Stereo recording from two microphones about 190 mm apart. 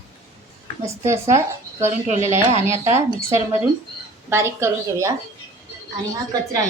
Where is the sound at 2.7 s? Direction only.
15° right (ahead or behind).